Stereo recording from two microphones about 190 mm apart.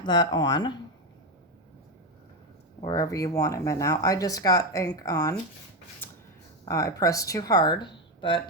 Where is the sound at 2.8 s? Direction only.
20° left (ahead or behind).